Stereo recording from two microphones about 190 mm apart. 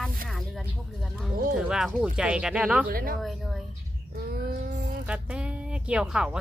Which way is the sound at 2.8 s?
50° right (ahead or behind).